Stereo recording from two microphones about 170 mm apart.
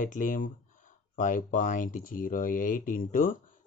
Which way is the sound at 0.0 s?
50° left (ahead or behind).